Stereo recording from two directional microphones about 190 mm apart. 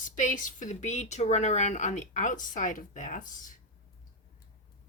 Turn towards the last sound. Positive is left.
turn(degrees=45)  # may be behind; listen again after turning